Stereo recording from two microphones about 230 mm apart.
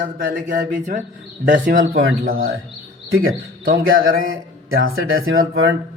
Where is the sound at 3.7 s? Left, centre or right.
Right.